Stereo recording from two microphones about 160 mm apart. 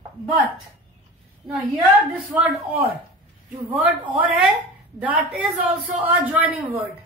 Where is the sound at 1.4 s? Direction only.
Centre (ahead or behind).